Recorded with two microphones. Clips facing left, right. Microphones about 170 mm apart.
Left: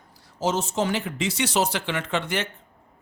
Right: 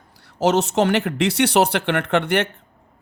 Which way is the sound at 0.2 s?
70° right (ahead or behind).